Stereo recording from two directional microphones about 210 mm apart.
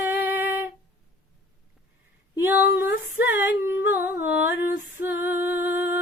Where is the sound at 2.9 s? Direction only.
50° left (ahead or behind).